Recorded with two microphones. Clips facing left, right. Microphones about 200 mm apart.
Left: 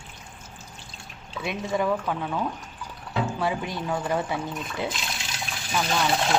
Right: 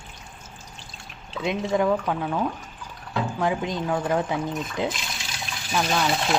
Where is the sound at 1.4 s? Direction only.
20° right (ahead or behind).